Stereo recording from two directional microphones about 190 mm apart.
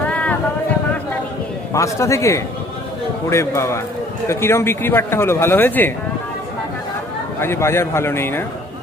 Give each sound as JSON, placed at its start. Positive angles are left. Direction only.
{"t": 0.0, "sound": "vehicle", "side_deg": 5}
{"t": 1.7, "sound": "speech", "side_deg": 15}
{"t": 7.4, "sound": "speech", "side_deg": 15}